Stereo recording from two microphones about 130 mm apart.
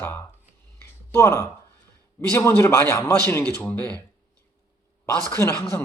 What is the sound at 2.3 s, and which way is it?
A man's voice, 20° left (ahead or behind).